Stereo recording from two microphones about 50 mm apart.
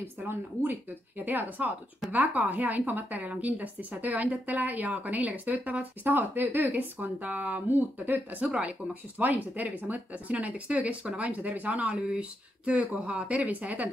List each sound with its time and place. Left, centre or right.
0.3 s speech: right
8.5 s speech: centre
9.2 s speech: right
12.1 s speech: right